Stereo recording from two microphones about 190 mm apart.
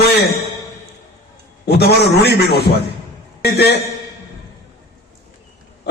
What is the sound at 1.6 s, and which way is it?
A man's voice, 60° left (ahead or behind).